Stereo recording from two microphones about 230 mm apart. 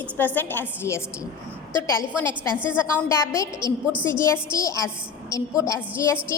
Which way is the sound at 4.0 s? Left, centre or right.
Centre.